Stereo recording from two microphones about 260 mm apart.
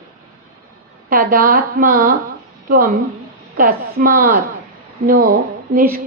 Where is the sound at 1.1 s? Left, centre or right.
Right.